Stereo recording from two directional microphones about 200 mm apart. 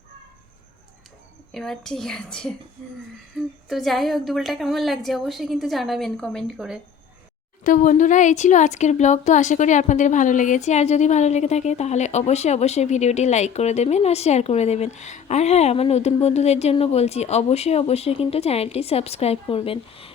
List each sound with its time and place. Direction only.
1.5 s a woman's voice: centre (ahead or behind)
7.6 s speech: 40° left (ahead or behind)